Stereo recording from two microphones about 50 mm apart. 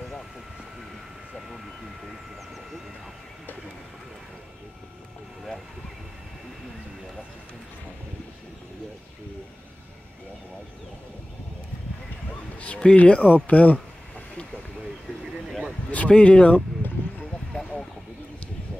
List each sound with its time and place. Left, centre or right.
12.5 s speech: left
16.1 s speech: left